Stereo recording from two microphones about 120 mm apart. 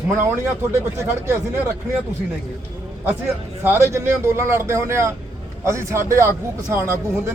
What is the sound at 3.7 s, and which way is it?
A man's voice, 20° right (ahead or behind).